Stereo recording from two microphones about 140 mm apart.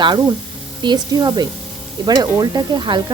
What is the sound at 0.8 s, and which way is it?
Speech, 30° right (ahead or behind).